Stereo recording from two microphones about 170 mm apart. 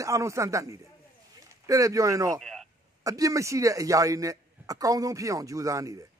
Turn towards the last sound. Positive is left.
turn(degrees=-20)  # may be behind; listen again after turning